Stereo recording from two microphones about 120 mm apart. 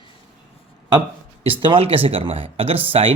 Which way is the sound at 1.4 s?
50° right (ahead or behind).